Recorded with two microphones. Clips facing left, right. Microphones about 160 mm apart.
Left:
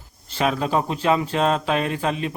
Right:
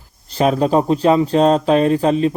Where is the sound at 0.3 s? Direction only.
40° right (ahead or behind).